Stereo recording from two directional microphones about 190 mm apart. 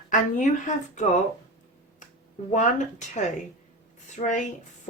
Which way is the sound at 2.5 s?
40° left (ahead or behind).